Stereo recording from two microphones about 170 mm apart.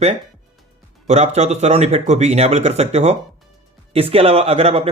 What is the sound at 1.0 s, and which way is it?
Speech, 40° right (ahead or behind).